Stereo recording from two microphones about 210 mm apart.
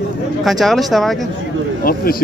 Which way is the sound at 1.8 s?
45° left (ahead or behind).